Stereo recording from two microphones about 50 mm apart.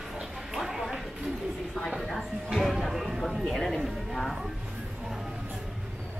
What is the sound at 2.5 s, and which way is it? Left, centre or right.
Speech, centre.